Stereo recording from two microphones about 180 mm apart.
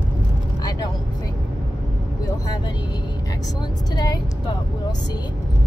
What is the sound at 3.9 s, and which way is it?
Speech, 25° left (ahead or behind).